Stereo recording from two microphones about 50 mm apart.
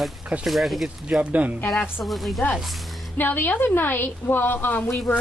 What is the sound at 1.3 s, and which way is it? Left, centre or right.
Speech, right.